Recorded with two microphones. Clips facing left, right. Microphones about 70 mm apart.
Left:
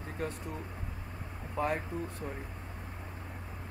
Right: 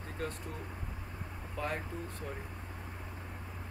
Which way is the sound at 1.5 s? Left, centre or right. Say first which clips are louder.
Left 5 dB; left.